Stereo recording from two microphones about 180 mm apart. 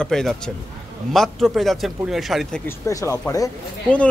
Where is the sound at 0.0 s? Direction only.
5° left (ahead or behind).